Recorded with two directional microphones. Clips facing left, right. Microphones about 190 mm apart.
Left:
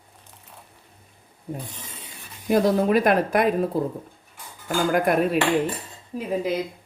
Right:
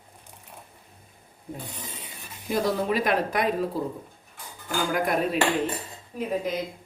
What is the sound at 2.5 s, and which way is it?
Speech, 50° left (ahead or behind).